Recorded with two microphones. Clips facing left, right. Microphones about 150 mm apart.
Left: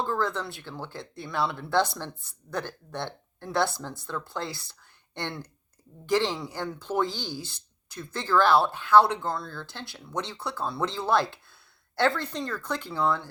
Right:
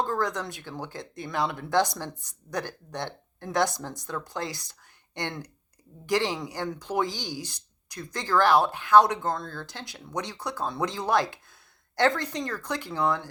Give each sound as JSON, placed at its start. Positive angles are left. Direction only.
{"t": 0.2, "sound": "speech", "side_deg": -15}
{"t": 9.3, "sound": "speech", "side_deg": -50}
{"t": 9.6, "sound": "speech", "side_deg": -15}